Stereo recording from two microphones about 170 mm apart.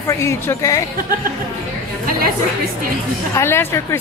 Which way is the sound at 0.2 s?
15° left (ahead or behind).